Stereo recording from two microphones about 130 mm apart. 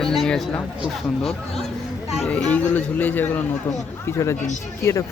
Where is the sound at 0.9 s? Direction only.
Centre (ahead or behind).